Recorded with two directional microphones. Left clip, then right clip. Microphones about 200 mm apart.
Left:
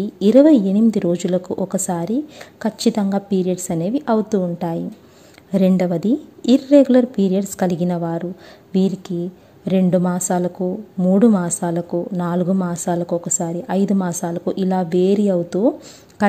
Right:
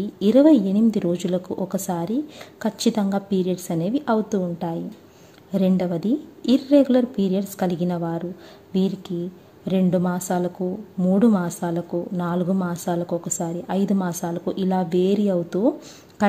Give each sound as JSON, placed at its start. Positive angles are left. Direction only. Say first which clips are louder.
{"t": 0.0, "sound": "a woman's voice", "louder": "left 4 dB", "side_deg": 20}